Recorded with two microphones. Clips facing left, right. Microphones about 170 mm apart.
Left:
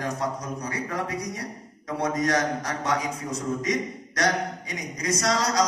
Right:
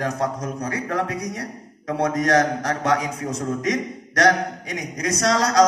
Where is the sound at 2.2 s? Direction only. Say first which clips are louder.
Right 7 dB; 65° right (ahead or behind); by 3.7 s 80° right.